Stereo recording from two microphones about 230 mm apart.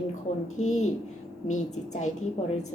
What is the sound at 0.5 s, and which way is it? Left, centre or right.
A woman's voice, left.